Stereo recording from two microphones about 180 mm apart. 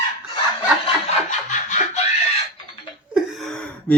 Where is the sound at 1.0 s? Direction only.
40° left (ahead or behind).